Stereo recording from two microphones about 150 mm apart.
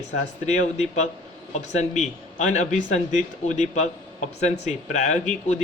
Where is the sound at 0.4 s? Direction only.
50° left (ahead or behind).